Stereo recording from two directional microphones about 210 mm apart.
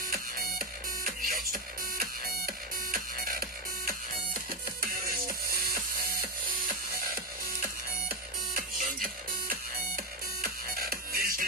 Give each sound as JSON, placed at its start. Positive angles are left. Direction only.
{"t": 0.1, "sound": "music", "side_deg": -45}
{"t": 7.2, "sound": "music", "side_deg": -45}